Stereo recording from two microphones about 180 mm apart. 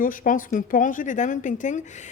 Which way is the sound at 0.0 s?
50° left (ahead or behind).